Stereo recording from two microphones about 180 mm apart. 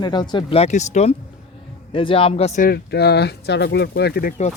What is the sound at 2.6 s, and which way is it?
Speech, 65° left (ahead or behind).